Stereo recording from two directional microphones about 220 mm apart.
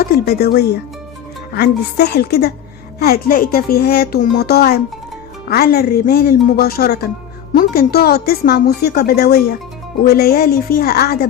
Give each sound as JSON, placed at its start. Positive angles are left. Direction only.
{"t": 0.0, "sound": "a woman's voice", "side_deg": 45}